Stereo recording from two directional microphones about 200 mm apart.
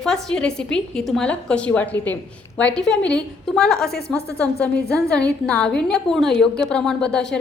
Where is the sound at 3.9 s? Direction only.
55° left (ahead or behind).